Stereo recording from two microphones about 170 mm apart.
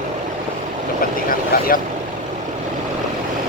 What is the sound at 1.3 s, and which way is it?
Speech, 55° left (ahead or behind).